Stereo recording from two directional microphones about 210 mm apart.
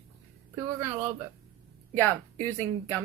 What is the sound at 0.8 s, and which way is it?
Speech, 10° right (ahead or behind).